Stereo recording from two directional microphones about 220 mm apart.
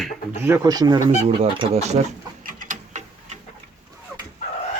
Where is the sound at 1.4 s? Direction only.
25° right (ahead or behind).